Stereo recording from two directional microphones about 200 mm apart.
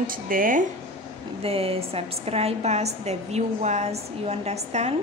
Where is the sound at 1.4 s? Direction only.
30° right (ahead or behind).